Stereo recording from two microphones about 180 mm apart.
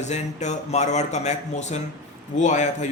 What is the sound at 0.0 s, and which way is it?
A man's voice, 40° left (ahead or behind).